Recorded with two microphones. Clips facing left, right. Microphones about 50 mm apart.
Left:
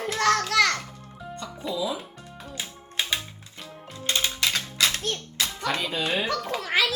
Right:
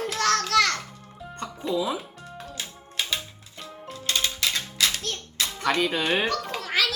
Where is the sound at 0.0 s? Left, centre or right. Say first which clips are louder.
Left 1 dB; left.